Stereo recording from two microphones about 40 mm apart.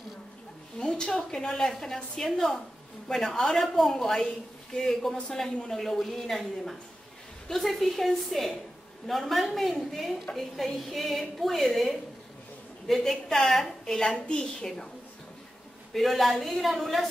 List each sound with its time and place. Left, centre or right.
0.7 s a sound: centre
1.1 s a woman's voice: centre
15.9 s a woman's voice: centre